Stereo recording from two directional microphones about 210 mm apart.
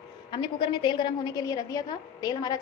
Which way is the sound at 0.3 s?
25° left (ahead or behind).